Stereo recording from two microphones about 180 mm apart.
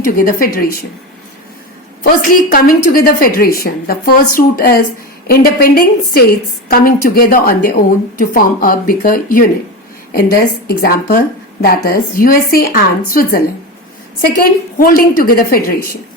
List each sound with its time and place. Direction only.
0.0 s a woman's voice: 50° left (ahead or behind)
2.3 s a woman's voice: 50° left (ahead or behind)